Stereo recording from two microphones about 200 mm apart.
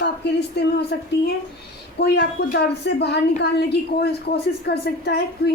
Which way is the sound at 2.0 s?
55° left (ahead or behind).